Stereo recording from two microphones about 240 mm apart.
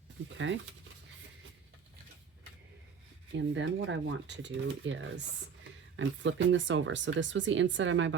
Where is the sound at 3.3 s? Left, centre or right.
Right.